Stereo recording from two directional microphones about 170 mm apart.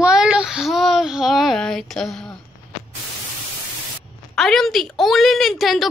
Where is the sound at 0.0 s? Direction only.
5° right (ahead or behind).